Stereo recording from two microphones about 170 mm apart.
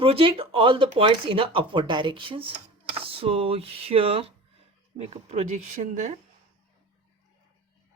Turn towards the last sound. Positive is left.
turn(degrees=-45)  # may be behind; listen again after turning